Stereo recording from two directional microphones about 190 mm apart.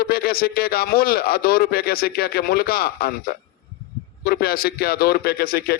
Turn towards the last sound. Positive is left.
turn(degrees=50)  # may be behind; listen again after turning